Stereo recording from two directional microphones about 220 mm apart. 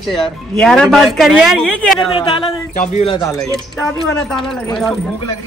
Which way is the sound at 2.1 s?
25° left (ahead or behind).